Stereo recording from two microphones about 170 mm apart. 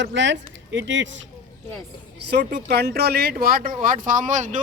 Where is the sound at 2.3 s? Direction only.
75° right (ahead or behind).